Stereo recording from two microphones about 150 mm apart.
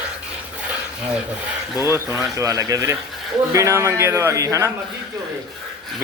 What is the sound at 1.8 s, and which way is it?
Speech, 20° right (ahead or behind).